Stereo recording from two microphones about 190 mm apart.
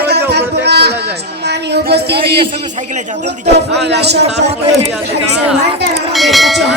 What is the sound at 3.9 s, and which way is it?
Speech, 60° right (ahead or behind).